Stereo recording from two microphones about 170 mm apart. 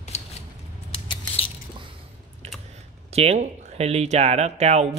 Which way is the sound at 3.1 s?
35° right (ahead or behind).